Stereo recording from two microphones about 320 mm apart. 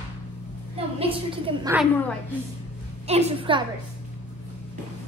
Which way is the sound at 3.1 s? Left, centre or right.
Centre.